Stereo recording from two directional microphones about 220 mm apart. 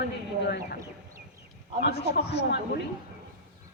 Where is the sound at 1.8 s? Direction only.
50° left (ahead or behind).